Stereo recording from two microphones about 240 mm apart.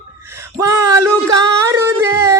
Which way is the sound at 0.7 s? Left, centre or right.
Centre.